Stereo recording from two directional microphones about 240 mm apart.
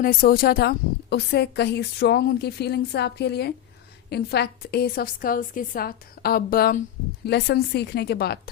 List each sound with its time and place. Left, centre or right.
0.0 s a woman's voice: left